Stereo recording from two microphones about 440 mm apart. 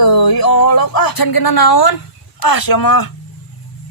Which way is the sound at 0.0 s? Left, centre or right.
Left.